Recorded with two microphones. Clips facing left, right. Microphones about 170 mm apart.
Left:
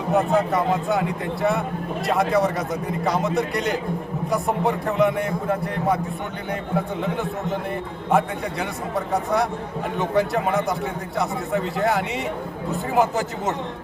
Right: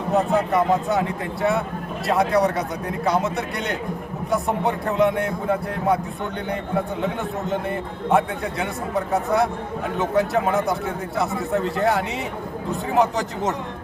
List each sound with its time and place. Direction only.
0.1 s a man's voice: centre (ahead or behind)